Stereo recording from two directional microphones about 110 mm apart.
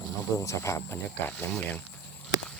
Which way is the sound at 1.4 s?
15° left (ahead or behind).